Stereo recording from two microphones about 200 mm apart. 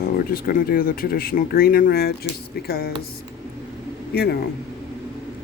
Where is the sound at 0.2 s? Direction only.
45° left (ahead or behind).